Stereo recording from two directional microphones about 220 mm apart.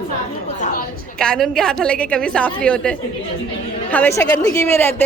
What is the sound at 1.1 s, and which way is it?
A woman's voice, 5° left (ahead or behind).